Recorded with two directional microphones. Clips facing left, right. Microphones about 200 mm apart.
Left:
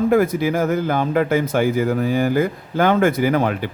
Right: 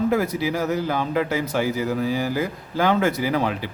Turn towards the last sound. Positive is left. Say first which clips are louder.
# left 5 dB
turn(degrees=55)  # may be behind; listen again after turning